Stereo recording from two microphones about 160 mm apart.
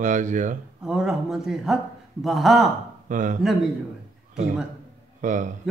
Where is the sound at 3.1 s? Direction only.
50° right (ahead or behind).